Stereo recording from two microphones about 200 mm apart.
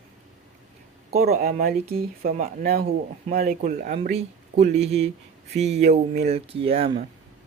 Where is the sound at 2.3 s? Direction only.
35° right (ahead or behind).